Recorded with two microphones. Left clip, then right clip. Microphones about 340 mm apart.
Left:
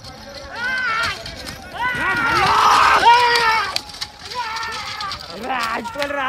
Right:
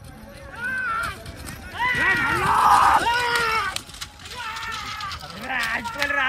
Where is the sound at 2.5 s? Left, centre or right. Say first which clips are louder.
Left 2 dB; centre.